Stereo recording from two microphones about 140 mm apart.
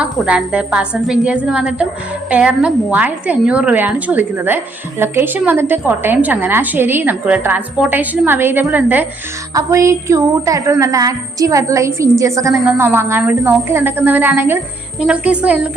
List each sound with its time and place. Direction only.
0.0 s a woman's voice: 10° right (ahead or behind)